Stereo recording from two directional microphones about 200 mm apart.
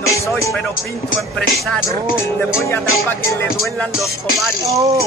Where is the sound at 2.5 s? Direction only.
10° left (ahead or behind).